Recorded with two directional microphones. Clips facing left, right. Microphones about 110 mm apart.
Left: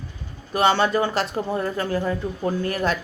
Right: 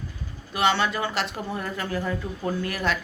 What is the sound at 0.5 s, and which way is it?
Speech, 40° left (ahead or behind).